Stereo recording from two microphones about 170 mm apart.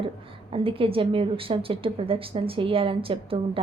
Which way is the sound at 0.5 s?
30° right (ahead or behind).